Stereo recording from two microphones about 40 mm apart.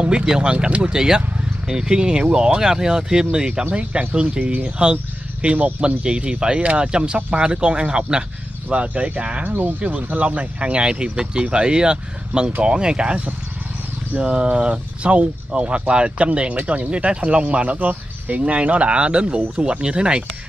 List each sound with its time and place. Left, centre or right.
0.0 s speech: right
8.6 s speech: right
9.4 s speech: right
9.8 s speech: right
14.3 s speech: right